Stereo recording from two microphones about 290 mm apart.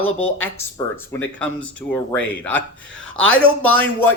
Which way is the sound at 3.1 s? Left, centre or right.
Left.